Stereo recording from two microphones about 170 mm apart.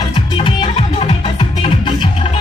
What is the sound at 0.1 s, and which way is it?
Music, 30° left (ahead or behind).